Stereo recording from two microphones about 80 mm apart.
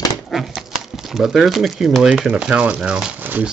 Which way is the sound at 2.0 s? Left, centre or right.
Centre.